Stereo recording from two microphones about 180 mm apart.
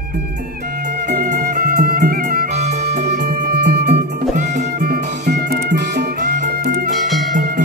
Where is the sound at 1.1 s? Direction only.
55° right (ahead or behind).